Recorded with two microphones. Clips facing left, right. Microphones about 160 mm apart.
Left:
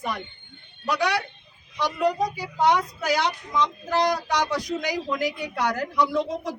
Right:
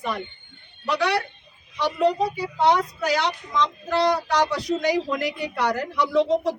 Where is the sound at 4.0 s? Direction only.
30° right (ahead or behind).